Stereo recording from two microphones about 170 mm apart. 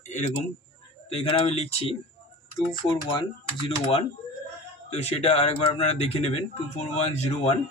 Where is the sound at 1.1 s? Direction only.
35° left (ahead or behind).